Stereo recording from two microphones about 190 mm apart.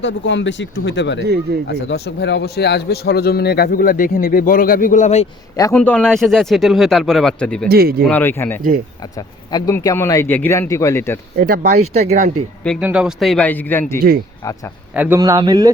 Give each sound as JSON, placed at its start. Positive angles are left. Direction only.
{"t": 0.0, "sound": "a man's voice", "side_deg": 70}
{"t": 5.7, "sound": "speech", "side_deg": 5}
{"t": 7.7, "sound": "speech", "side_deg": -55}
{"t": 8.0, "sound": "speech", "side_deg": 10}
{"t": 11.3, "sound": "speech", "side_deg": -50}
{"t": 12.6, "sound": "speech", "side_deg": 0}
{"t": 14.9, "sound": "speech", "side_deg": -10}
{"t": 15.2, "sound": "speech", "side_deg": -20}